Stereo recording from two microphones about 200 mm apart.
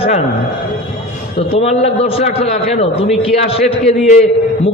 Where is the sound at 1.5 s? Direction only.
30° left (ahead or behind).